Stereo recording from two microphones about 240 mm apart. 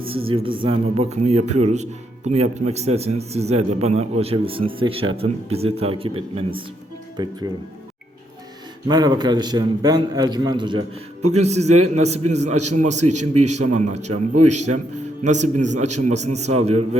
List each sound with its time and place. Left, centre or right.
0.3 s a man's voice: right
8.9 s a man's voice: centre
12.5 s a man's voice: right
12.7 s speech: right
13.4 s a man's voice: right
13.7 s speech: right
14.1 s a man's voice: right
15.2 s speech: right